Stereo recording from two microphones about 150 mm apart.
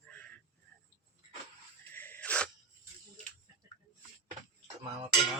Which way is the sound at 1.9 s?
15° left (ahead or behind).